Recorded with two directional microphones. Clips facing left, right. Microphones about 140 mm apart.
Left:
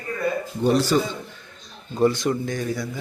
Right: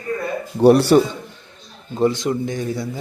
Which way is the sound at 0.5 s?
65° right (ahead or behind).